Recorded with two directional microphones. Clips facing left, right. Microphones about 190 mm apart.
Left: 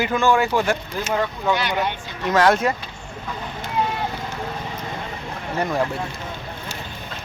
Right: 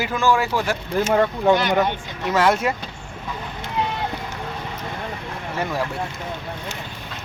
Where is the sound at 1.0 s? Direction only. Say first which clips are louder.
Right 4 dB; 50° right (ahead or behind).